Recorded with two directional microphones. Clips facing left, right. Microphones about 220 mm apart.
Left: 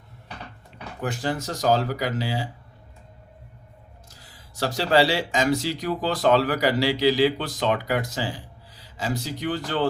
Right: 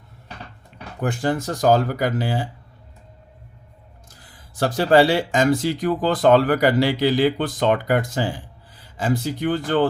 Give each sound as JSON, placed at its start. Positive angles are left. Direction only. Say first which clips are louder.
{"t": 1.0, "sound": "speech", "louder": "right 5 dB", "side_deg": -50}
{"t": 4.1, "sound": "speech", "louder": "right 1 dB", "side_deg": -50}